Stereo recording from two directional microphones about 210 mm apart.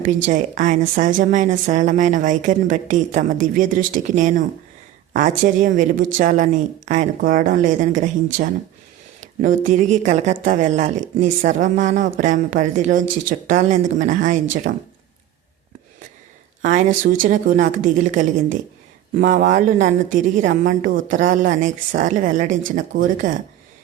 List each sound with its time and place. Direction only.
0.3 s speech: 35° right (ahead or behind)
16.6 s speech: 40° right (ahead or behind)